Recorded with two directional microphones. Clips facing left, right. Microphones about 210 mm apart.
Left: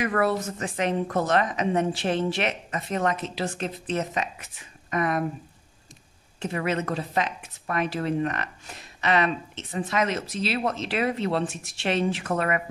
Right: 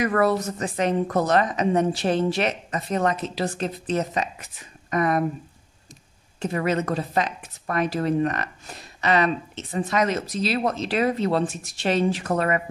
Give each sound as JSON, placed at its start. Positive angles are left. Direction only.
{"t": 0.0, "sound": "a woman's voice", "side_deg": -40}
{"t": 6.4, "sound": "a woman's voice", "side_deg": -40}